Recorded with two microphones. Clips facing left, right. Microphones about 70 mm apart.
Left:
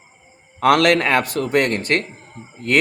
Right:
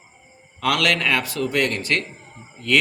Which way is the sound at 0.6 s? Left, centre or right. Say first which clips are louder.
Left 6 dB; left.